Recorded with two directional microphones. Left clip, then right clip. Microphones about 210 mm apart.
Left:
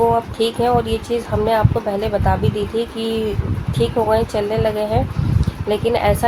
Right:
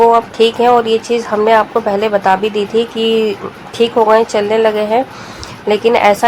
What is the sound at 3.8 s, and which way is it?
Speech, 15° right (ahead or behind).